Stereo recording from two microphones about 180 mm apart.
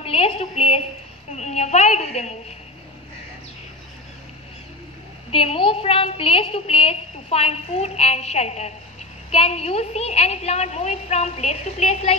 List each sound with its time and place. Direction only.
0.0 s a woman's voice: 30° left (ahead or behind)
5.3 s a woman's voice: 30° left (ahead or behind)